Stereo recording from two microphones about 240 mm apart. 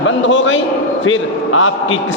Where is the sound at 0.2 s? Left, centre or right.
Left.